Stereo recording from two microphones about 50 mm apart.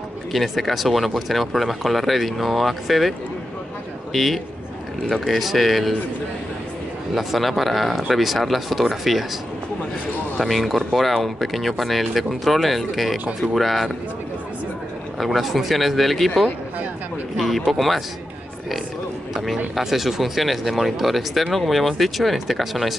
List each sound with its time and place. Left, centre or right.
0.3 s a man's voice: centre
7.2 s speech: centre
10.3 s speech: centre
15.1 s speech: centre
17.4 s speech: centre
19.4 s speech: centre